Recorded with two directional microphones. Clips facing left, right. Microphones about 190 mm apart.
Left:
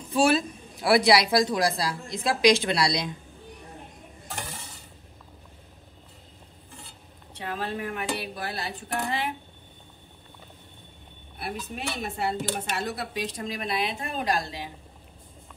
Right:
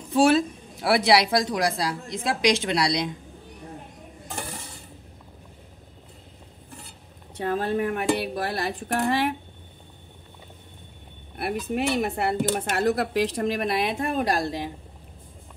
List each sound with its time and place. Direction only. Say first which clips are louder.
0.1 s a man's voice: right 3 dB; 20° right (ahead or behind)
7.3 s speech: right 7 dB; 45° right (ahead or behind)
11.3 s speech: right 8 dB; 65° right (ahead or behind)
12.9 s speech: right 8 dB; 75° right (ahead or behind); by 14.7 s 50° right (ahead or behind)